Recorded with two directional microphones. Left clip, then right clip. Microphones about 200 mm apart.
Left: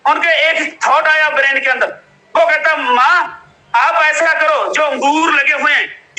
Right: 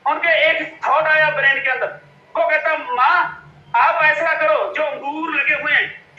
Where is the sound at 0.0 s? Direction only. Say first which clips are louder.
Left 4 dB; 50° left (ahead or behind).